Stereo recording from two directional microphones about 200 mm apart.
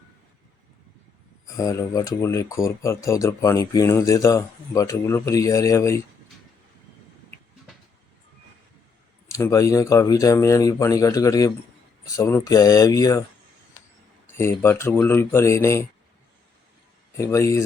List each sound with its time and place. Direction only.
1.5 s speech: 15° left (ahead or behind)
9.3 s speech: 15° left (ahead or behind)
14.3 s speech: 10° left (ahead or behind)
17.2 s speech: 15° left (ahead or behind)